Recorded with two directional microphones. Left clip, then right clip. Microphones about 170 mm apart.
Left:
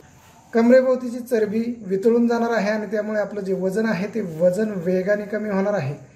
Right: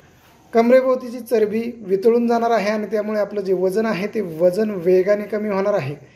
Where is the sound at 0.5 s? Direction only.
25° right (ahead or behind).